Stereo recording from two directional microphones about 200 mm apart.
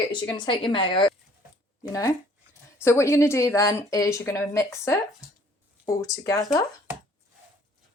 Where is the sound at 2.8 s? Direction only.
15° left (ahead or behind).